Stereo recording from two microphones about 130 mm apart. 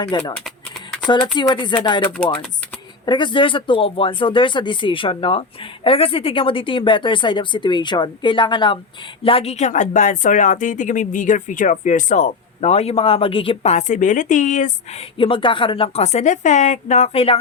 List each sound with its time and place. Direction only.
0.1 s speech: 35° left (ahead or behind)
9.2 s speech: 50° left (ahead or behind); by 14.7 s 70° left (ahead or behind)
15.2 s a woman's voice: 40° left (ahead or behind)